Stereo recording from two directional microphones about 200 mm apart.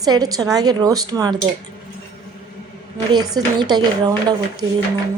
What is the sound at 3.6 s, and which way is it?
Speech, 20° right (ahead or behind).